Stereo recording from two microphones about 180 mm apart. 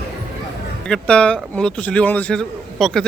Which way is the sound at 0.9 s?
5° left (ahead or behind).